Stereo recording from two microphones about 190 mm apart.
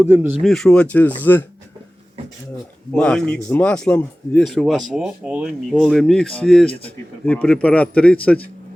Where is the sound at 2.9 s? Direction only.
5° left (ahead or behind).